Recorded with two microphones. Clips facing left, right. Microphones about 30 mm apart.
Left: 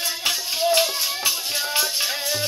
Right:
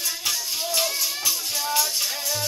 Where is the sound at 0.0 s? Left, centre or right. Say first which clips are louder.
Left 3 dB; left.